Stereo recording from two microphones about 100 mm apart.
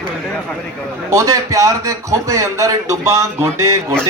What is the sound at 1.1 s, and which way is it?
A man's voice, 30° right (ahead or behind).